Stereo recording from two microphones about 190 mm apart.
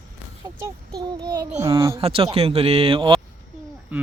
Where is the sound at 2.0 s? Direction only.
30° right (ahead or behind).